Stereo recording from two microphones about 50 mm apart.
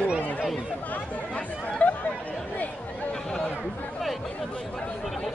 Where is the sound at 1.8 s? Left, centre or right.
Left.